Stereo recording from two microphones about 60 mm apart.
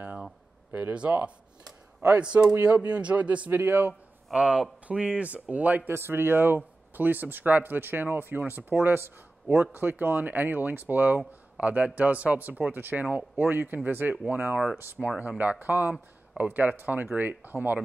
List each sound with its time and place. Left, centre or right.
0.0 s a sound: right
0.9 s speech: right
3.5 s speech: right
4.3 s speech: centre
5.9 s speech: right
11.5 s speech: right